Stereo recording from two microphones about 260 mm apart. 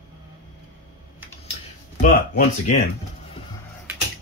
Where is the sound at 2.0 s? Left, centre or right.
Left.